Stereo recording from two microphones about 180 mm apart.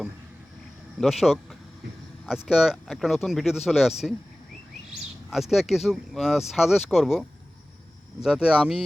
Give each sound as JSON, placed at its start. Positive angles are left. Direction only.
{"t": 0.9, "sound": "speech", "side_deg": 0}